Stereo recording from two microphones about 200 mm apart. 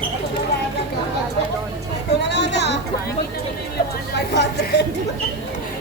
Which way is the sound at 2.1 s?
55° left (ahead or behind).